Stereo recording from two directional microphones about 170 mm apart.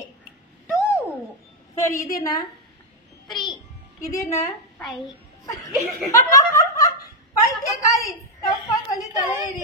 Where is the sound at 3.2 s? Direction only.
Centre (ahead or behind).